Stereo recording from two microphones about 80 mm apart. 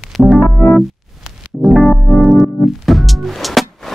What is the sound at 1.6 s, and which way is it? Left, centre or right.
Music, centre.